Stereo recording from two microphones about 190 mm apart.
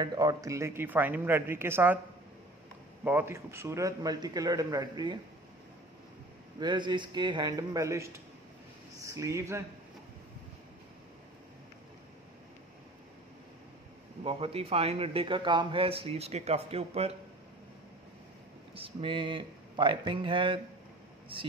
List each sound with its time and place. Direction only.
0.0 s speech: 20° right (ahead or behind)
3.0 s a man's voice: 10° right (ahead or behind)
6.6 s a man's voice: 25° right (ahead or behind)
14.2 s a man's voice: 30° right (ahead or behind)
18.8 s a man's voice: 30° right (ahead or behind)